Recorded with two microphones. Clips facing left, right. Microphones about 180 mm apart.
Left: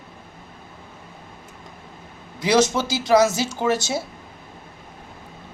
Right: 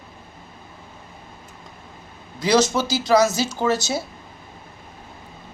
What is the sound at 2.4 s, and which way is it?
Speech, 20° left (ahead or behind).